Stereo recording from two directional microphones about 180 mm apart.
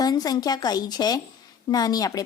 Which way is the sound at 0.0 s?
20° left (ahead or behind).